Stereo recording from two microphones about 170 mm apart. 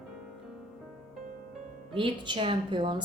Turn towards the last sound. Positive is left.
turn(degrees=-25)  # may be behind; listen again after turning